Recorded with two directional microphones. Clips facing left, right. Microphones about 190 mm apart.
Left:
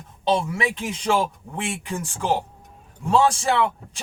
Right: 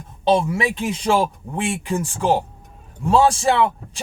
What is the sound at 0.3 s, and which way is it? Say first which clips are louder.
Speech: right 4 dB; 30° right (ahead or behind).